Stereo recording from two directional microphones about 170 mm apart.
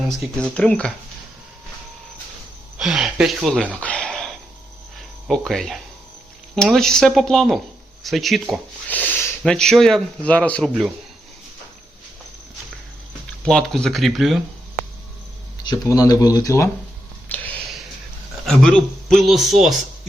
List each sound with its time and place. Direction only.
0.0 s speech: centre (ahead or behind)
2.7 s speech: 5° right (ahead or behind)
3.8 s a sound: 5° left (ahead or behind)
5.3 s speech: centre (ahead or behind)
13.4 s speech: 5° left (ahead or behind)
15.6 s speech: 20° left (ahead or behind)
17.2 s a sound: 10° left (ahead or behind)
18.4 s speech: 5° left (ahead or behind)